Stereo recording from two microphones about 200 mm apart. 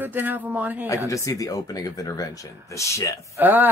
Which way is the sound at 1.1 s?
15° left (ahead or behind).